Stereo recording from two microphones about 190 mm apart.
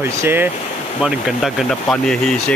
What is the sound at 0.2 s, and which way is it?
Speech, 10° right (ahead or behind).